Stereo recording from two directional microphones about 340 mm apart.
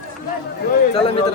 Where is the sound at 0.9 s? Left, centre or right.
Centre.